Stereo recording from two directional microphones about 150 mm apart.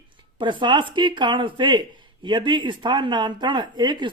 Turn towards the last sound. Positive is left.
turn(degrees=-30)  # may be behind; listen again after turning